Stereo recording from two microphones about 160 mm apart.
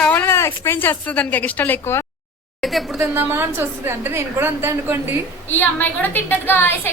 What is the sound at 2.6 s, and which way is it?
Speech, centre (ahead or behind).